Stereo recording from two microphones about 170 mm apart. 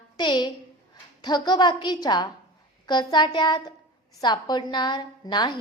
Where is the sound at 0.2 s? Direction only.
25° left (ahead or behind).